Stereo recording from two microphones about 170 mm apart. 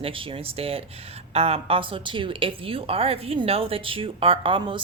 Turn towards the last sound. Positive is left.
turn(degrees=-30)  # may be behind; listen again after turning